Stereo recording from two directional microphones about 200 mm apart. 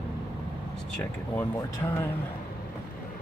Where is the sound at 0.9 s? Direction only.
10° left (ahead or behind).